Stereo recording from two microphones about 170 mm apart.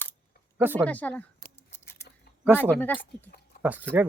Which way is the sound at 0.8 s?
10° left (ahead or behind).